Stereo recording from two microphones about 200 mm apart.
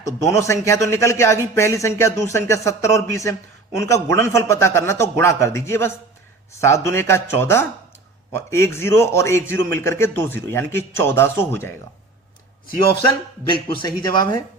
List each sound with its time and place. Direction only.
0.0 s speech: 15° left (ahead or behind)
13.8 s speech: 20° left (ahead or behind)